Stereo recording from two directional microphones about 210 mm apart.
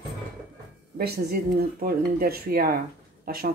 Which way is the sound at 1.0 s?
50° right (ahead or behind).